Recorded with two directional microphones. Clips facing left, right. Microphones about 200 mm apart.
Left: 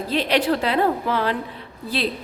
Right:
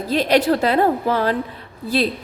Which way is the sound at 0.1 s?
40° right (ahead or behind).